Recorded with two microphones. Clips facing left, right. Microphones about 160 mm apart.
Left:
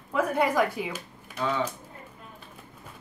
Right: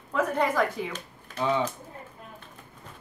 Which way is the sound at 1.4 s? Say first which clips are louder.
Right 2 dB; 15° right (ahead or behind).